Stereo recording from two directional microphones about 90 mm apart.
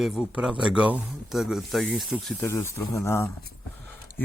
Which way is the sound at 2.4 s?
30° left (ahead or behind).